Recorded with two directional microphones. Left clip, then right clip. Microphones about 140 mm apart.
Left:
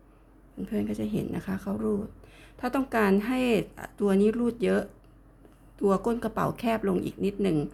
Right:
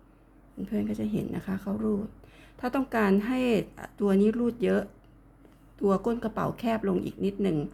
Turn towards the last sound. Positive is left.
turn(degrees=10)  # may be behind; listen again after turning